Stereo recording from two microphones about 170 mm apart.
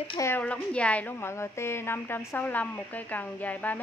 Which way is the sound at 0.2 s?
10° left (ahead or behind).